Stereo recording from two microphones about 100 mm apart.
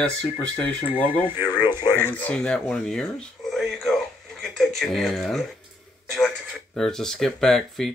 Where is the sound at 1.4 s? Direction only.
45° left (ahead or behind).